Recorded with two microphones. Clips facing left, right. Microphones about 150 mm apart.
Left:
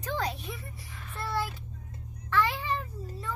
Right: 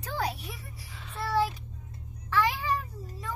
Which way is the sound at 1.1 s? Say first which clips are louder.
Right 5 dB; 10° right (ahead or behind).